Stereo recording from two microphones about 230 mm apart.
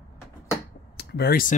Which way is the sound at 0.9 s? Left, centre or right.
Left.